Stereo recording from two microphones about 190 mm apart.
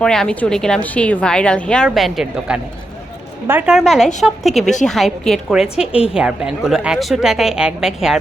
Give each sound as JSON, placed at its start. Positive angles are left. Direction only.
{"t": 0.0, "sound": "a woman's voice", "side_deg": 5}
{"t": 3.4, "sound": "a woman's voice", "side_deg": -10}
{"t": 3.8, "sound": "a woman's voice", "side_deg": 0}